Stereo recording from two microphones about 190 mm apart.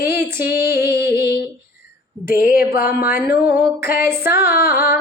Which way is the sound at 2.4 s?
50° left (ahead or behind).